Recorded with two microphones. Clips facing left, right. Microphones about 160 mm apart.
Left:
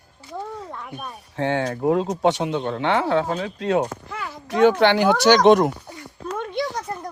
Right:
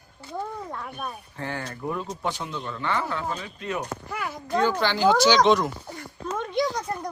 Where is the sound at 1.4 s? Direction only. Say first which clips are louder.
Left 11 dB; 80° left.